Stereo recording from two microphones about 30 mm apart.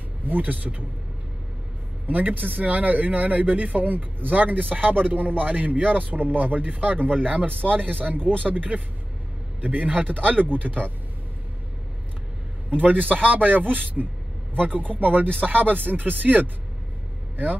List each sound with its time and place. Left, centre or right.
0.3 s speech: right
2.0 s speech: right
8.7 s speech: right
9.6 s a man's voice: right
9.8 s speech: right
13.1 s a man's voice: right